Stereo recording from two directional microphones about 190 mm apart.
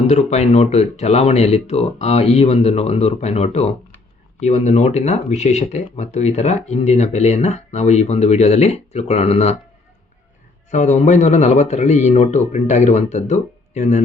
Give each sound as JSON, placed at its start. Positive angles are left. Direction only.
{"t": 0.1, "sound": "speech", "side_deg": 35}
{"t": 10.7, "sound": "speech", "side_deg": 40}